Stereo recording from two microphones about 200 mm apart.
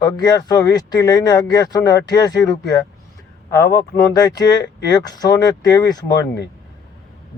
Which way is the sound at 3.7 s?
20° left (ahead or behind).